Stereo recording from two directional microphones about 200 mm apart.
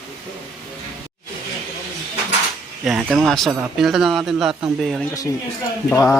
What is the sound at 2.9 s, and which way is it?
Speech, centre (ahead or behind).